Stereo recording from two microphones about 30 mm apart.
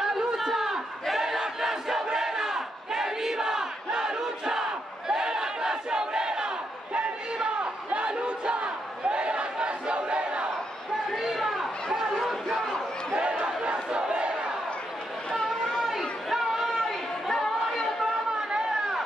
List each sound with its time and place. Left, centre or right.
0.0 s a sound: centre
1.2 s battle cry: centre; by 10.4 s right
11.4 s chatter: centre
12.2 s a sound: centre
13.1 s crowd: right
16.3 s chatter: centre
16.8 s chatter: centre